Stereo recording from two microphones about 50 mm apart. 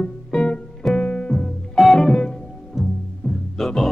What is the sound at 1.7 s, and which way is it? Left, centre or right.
Music, centre.